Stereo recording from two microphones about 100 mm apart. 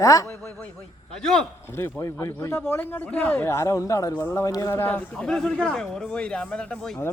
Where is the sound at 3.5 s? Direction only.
30° left (ahead or behind).